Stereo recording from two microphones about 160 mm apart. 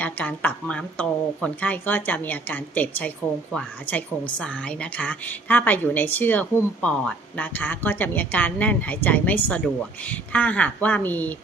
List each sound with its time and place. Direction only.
0.0 s a woman's voice: 10° left (ahead or behind)